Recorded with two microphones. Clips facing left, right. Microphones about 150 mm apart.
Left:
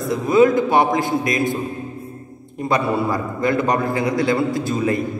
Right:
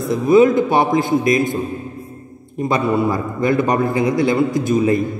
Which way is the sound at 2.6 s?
25° right (ahead or behind).